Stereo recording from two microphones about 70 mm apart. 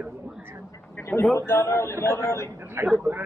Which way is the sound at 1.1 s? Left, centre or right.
Left.